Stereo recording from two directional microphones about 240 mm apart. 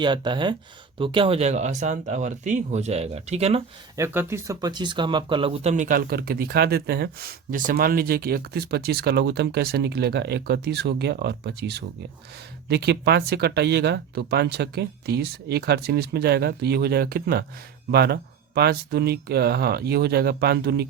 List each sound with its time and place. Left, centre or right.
0.0 s speech: centre
3.9 s speech: centre; by 20.8 s right